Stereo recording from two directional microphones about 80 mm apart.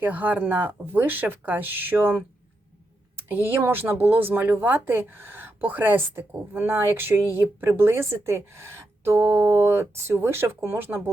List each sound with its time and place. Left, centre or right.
0.0 s speech: right
3.2 s speech: right